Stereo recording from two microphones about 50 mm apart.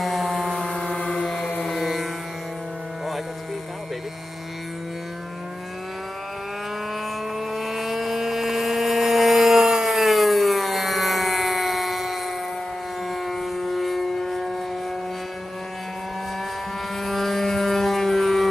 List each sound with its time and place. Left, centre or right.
0.0 s vehicle: centre
0.6 s a sound: centre
1.7 s music: centre
7.3 s vehicle: centre
17.0 s vehicle: centre